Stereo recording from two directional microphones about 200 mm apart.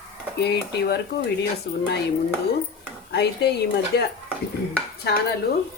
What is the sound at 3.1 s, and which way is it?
Speech, 55° left (ahead or behind).